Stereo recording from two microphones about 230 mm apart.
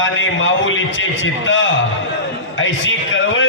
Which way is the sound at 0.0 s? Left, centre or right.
Left.